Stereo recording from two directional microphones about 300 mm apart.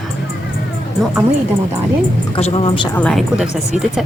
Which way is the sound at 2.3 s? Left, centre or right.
Centre.